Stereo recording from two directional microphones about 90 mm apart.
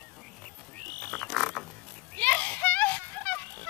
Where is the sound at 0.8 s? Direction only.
15° left (ahead or behind).